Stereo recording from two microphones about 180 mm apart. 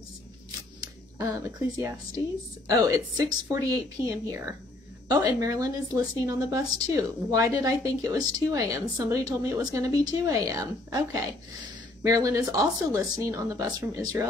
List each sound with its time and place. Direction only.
1.1 s speech: 15° right (ahead or behind)